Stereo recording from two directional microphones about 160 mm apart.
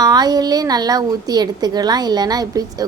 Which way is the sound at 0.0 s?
25° right (ahead or behind).